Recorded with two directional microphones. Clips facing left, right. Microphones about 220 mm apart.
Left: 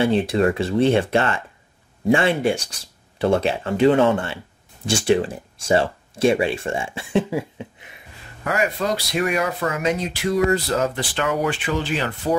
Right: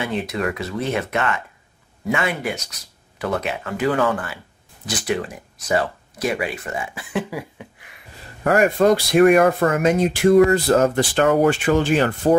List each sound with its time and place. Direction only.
0.0 s speech: 30° left (ahead or behind)
8.5 s speech: 50° right (ahead or behind)